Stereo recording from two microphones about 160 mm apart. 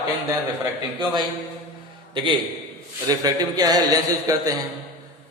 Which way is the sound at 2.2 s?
30° right (ahead or behind).